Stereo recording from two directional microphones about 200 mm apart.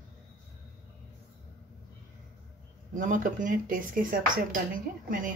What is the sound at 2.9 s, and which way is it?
Speech, 40° right (ahead or behind).